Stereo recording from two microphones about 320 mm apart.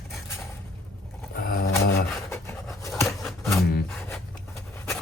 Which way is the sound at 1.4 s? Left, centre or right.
Left.